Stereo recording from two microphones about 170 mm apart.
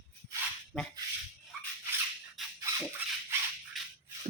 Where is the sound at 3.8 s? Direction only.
Centre (ahead or behind).